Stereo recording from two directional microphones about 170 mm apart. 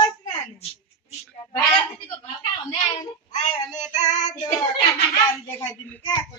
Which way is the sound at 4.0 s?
45° left (ahead or behind).